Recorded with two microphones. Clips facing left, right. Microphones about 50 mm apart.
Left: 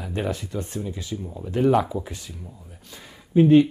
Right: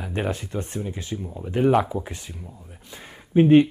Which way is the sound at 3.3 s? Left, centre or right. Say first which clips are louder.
Even; right.